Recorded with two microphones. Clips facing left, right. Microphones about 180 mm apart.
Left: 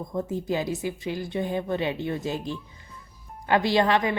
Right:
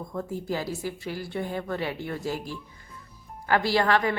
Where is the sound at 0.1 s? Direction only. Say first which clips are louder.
Left 3 dB; 20° left (ahead or behind).